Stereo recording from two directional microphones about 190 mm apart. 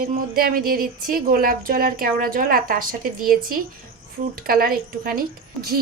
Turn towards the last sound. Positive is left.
turn(degrees=-50)  # may be behind; listen again after turning